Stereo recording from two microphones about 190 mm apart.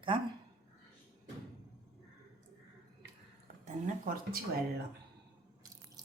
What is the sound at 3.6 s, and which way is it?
Speech, 50° right (ahead or behind).